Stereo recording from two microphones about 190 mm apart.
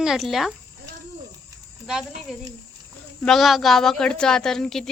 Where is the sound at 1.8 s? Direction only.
Centre (ahead or behind).